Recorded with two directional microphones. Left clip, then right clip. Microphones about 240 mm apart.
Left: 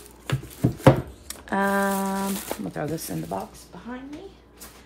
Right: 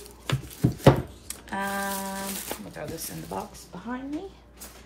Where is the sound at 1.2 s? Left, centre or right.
Left.